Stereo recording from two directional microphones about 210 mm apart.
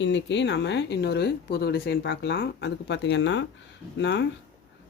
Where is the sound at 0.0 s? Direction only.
55° left (ahead or behind).